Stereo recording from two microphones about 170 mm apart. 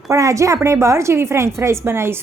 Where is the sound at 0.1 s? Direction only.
20° right (ahead or behind).